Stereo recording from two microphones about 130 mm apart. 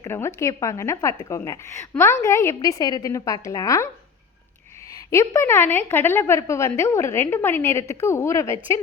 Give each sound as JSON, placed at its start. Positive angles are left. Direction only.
{"t": 0.0, "sound": "a woman's voice", "side_deg": 20}
{"t": 5.1, "sound": "a woman's voice", "side_deg": 25}